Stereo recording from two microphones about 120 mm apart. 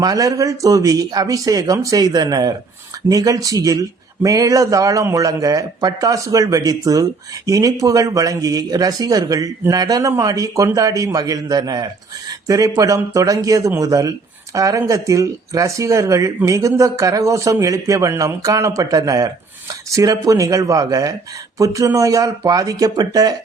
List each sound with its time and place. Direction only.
0.0 s speech: 30° right (ahead or behind)